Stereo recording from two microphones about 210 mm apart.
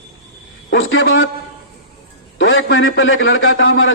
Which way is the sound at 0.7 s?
65° left (ahead or behind).